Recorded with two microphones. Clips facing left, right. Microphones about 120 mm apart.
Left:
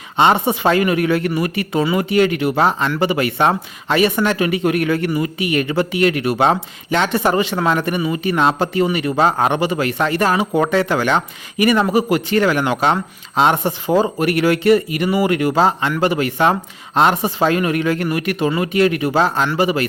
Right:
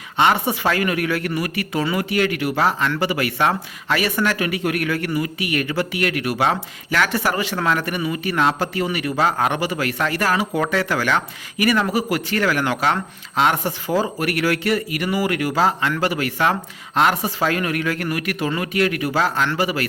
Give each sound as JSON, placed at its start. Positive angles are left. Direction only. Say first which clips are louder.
{"t": 0.2, "sound": "speech", "louder": "left 4 dB", "side_deg": 25}